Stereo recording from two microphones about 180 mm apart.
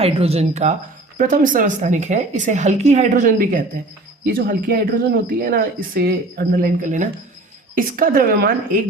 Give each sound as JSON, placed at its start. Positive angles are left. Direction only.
{"t": 0.0, "sound": "speech", "side_deg": -35}